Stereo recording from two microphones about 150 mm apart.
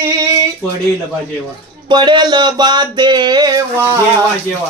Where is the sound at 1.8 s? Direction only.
30° right (ahead or behind).